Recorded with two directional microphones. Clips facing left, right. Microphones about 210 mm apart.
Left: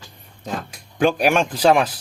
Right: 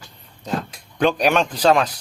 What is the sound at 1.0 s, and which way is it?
Speech, 5° left (ahead or behind).